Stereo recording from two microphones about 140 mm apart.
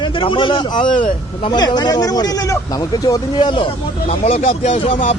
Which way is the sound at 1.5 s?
30° left (ahead or behind).